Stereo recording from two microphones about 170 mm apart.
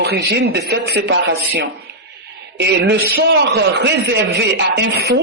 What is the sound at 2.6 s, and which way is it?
Speech, 90° right.